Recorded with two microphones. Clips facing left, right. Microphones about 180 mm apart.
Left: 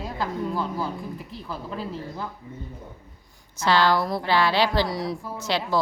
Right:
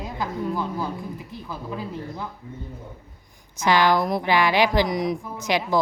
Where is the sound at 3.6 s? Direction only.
15° right (ahead or behind).